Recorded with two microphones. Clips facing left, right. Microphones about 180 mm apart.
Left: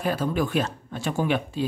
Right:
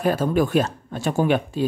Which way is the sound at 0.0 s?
45° right (ahead or behind).